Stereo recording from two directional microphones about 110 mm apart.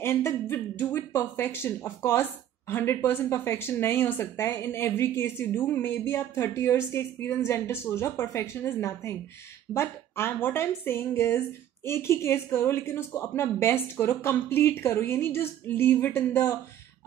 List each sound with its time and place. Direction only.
0.0 s speech: 20° left (ahead or behind)